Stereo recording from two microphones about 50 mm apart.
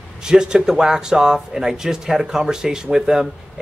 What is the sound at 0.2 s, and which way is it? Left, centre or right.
Speech, centre.